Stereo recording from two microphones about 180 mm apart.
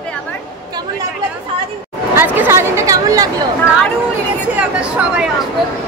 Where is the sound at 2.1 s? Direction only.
10° right (ahead or behind).